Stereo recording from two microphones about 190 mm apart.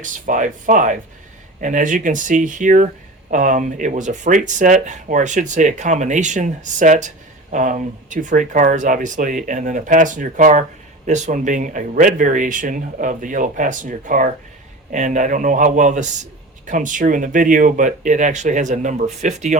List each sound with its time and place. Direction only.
0.0 s speech: 40° right (ahead or behind)